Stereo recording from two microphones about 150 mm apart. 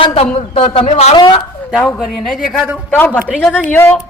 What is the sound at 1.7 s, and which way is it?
Speech, 10° left (ahead or behind).